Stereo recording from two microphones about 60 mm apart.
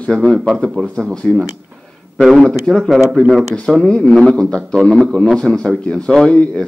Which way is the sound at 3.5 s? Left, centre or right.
Centre.